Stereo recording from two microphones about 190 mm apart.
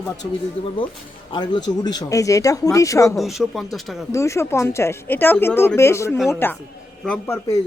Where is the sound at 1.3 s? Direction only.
25° left (ahead or behind).